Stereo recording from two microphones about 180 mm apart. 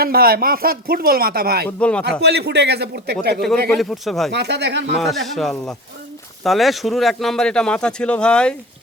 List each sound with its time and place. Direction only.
0.0 s speech: 55° right (ahead or behind)
1.8 s a man's voice: 5° left (ahead or behind)
2.0 s speech: 65° right (ahead or behind)
3.8 s speech: centre (ahead or behind)
4.3 s speech: 70° right (ahead or behind)
4.9 s speech: centre (ahead or behind)